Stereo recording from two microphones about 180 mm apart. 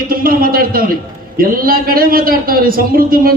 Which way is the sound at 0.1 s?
55° right (ahead or behind).